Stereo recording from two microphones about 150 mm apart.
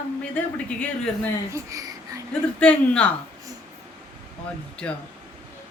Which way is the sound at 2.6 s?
10° left (ahead or behind).